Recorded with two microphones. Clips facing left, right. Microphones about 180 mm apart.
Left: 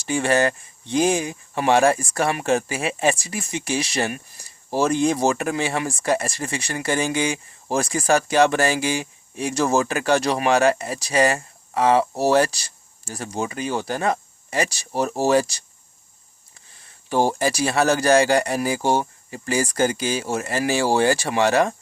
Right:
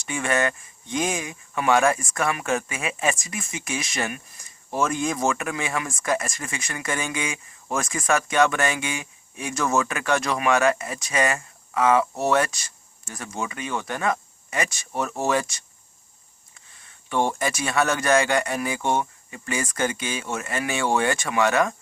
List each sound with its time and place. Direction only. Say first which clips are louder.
0.0 s speech: left 5 dB; 35° left (ahead or behind)